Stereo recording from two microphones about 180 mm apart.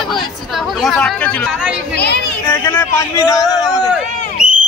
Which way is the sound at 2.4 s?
15° left (ahead or behind).